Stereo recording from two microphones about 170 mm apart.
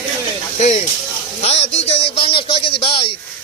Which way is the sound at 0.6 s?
40° left (ahead or behind).